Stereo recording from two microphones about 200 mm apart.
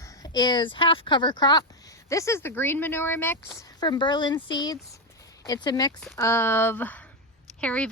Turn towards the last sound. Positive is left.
turn(degrees=5)  # may be behind; listen again after turning